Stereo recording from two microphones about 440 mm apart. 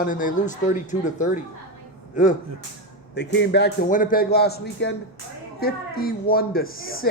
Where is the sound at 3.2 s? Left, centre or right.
Left.